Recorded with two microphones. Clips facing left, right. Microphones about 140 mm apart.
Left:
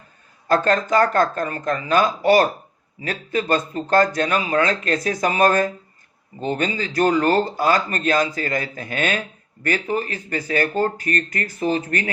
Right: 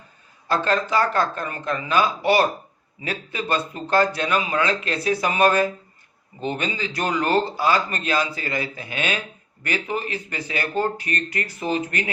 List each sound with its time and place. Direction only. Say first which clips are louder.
0.4 s speech: left 3 dB; 45° left (ahead or behind)